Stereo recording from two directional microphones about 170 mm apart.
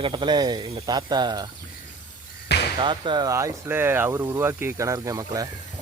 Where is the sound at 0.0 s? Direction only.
30° right (ahead or behind).